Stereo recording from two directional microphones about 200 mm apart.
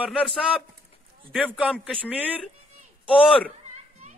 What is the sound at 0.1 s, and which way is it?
A man's voice, 5° left (ahead or behind).